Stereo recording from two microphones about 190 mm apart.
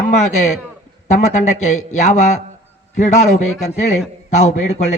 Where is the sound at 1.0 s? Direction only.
40° left (ahead or behind).